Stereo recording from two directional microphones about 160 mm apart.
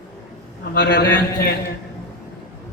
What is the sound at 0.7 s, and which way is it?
Speech, 80° left.